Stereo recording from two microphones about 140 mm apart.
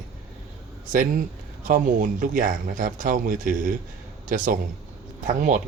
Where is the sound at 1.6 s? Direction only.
75° right (ahead or behind).